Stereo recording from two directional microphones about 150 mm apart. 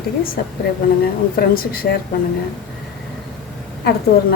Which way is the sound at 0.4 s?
90° left.